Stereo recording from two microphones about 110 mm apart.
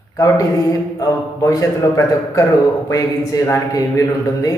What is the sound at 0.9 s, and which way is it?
A man's voice, 30° left (ahead or behind).